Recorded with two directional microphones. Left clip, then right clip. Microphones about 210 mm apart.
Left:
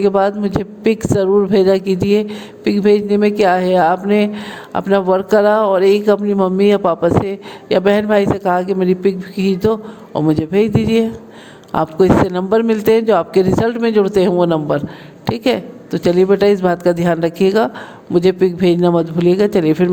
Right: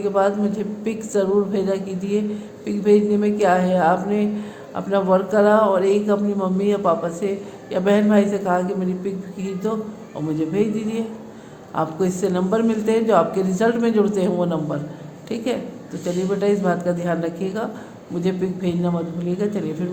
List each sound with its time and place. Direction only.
0.0 s a woman's voice: 45° left (ahead or behind)